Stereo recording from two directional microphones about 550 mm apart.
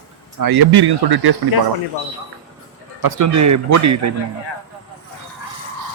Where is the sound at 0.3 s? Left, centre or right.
Right.